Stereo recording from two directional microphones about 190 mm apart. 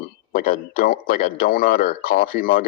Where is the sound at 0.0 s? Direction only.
50° left (ahead or behind).